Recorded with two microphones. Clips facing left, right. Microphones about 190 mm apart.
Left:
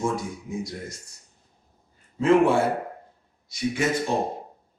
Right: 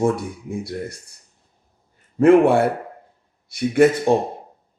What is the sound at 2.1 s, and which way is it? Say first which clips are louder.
Speech: right 6 dB; 60° right (ahead or behind).